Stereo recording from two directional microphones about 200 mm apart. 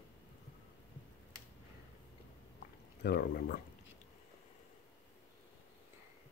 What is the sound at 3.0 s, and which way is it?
Speech, 50° left (ahead or behind).